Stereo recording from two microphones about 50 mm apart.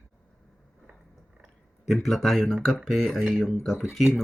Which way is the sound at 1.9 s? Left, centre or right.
Centre.